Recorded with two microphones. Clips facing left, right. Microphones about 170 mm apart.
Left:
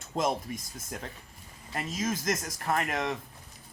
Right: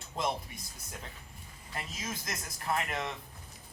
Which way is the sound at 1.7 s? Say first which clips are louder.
Left 9 dB; 45° left (ahead or behind).